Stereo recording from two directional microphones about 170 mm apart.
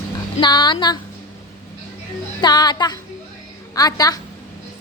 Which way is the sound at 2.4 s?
25° left (ahead or behind).